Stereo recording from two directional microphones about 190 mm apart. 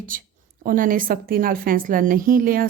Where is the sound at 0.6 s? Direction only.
45° right (ahead or behind).